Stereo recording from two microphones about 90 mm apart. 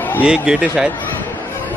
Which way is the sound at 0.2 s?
10° right (ahead or behind).